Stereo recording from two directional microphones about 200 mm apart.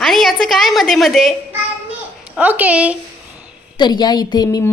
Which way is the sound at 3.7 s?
20° left (ahead or behind).